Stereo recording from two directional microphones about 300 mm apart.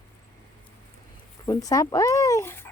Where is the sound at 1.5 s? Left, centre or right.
Centre.